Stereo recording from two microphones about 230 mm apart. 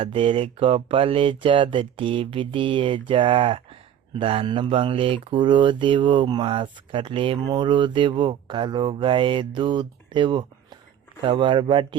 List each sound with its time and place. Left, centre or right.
0.0 s speech: right